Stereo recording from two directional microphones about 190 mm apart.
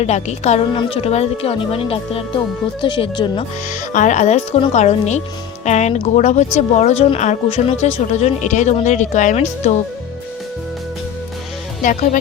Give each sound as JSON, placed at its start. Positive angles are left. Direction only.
{"t": 0.0, "sound": "a woman's voice", "side_deg": 35}
{"t": 3.7, "sound": "a woman's voice", "side_deg": 40}
{"t": 11.8, "sound": "speech", "side_deg": 45}